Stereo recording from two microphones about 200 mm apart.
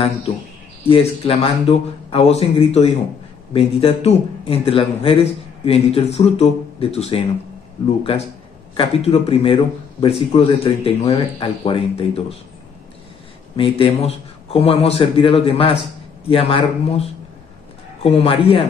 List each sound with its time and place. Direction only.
0.8 s a man's voice: 30° left (ahead or behind)
8.7 s speech: 30° left (ahead or behind)
13.6 s speech: 25° left (ahead or behind)